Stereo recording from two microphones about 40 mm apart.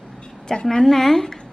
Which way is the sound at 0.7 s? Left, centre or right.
Centre.